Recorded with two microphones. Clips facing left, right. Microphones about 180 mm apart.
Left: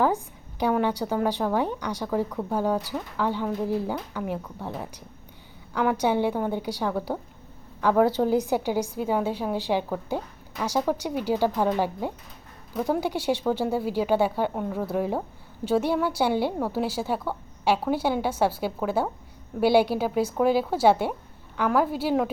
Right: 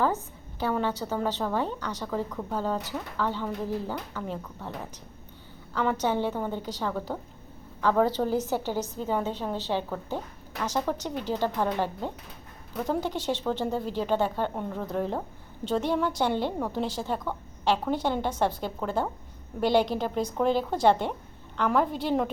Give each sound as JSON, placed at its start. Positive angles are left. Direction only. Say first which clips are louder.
{"t": 0.6, "sound": "a woman's voice", "louder": "left 4 dB", "side_deg": 15}